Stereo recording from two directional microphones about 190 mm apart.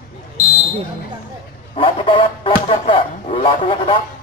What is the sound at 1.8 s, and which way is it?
Speech, 25° left (ahead or behind).